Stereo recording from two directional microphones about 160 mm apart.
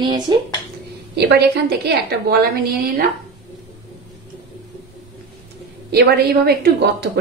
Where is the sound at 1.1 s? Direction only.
90° right.